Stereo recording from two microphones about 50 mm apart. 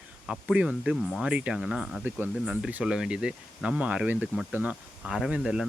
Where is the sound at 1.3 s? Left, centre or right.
Centre.